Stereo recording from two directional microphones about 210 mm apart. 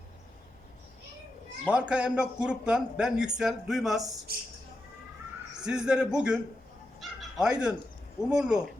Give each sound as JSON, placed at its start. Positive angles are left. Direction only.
{"t": 1.7, "sound": "speech", "side_deg": -5}
{"t": 4.3, "sound": "speech", "side_deg": -45}
{"t": 5.6, "sound": "speech", "side_deg": -5}